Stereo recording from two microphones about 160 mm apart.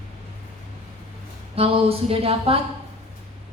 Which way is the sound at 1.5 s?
40° right (ahead or behind).